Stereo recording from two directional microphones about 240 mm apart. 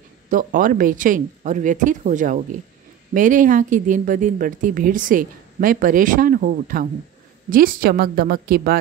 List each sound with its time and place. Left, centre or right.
0.3 s speech: right